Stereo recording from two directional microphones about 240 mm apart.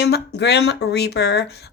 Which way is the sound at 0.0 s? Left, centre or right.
Left.